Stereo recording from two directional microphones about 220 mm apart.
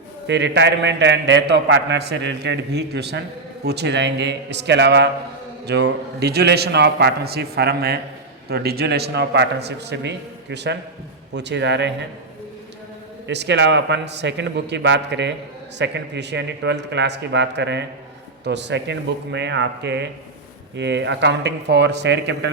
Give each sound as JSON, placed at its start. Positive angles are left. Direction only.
{"t": 0.3, "sound": "a man's voice", "side_deg": -50}
{"t": 13.2, "sound": "a man's voice", "side_deg": -50}